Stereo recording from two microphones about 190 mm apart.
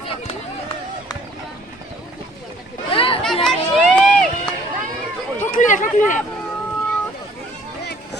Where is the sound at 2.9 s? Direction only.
30° left (ahead or behind).